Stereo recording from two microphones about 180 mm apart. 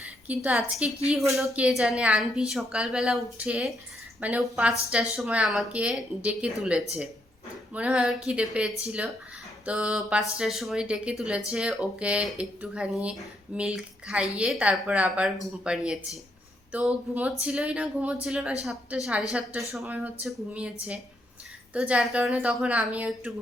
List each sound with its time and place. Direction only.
0.3 s a woman's voice: 10° right (ahead or behind)